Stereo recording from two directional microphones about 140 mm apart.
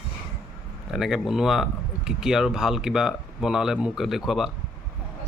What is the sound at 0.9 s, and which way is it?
Speech, centre (ahead or behind).